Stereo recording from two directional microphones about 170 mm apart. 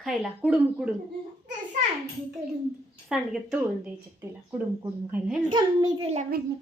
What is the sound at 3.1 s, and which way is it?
Speech, 5° right (ahead or behind).